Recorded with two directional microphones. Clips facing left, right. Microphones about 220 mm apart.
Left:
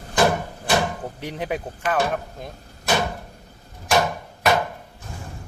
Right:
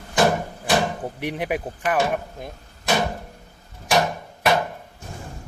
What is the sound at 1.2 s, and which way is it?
Speech, 15° right (ahead or behind).